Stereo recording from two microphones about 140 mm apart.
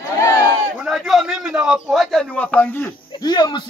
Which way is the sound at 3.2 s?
30° left (ahead or behind).